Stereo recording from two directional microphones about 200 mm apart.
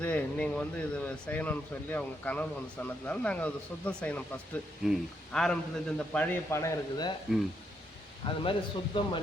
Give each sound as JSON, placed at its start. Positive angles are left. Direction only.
{"t": 0.0, "sound": "speech", "side_deg": 5}
{"t": 6.1, "sound": "speech", "side_deg": 15}
{"t": 8.2, "sound": "a man's voice", "side_deg": 25}